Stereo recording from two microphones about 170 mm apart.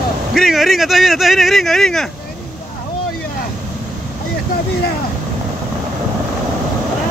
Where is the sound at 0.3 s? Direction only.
Centre (ahead or behind).